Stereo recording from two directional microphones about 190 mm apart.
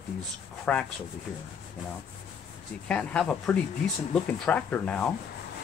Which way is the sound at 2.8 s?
5° left (ahead or behind).